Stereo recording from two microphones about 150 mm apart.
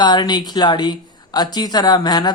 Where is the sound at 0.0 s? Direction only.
30° left (ahead or behind).